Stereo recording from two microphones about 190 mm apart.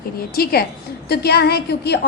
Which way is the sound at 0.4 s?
55° left (ahead or behind).